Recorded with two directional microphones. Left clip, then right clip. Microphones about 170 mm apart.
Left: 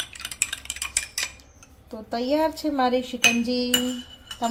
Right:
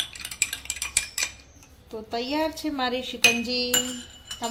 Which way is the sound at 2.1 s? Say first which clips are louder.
Left 4 dB; 45° left (ahead or behind).